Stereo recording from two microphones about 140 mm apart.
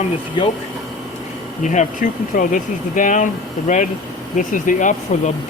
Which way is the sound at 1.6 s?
60° left (ahead or behind).